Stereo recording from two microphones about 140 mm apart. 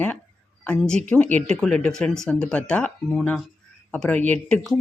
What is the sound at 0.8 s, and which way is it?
Speech, 5° left (ahead or behind).